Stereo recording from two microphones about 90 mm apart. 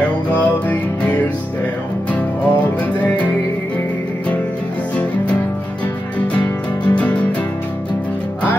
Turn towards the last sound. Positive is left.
turn(degrees=15)  # may be behind; listen again after turning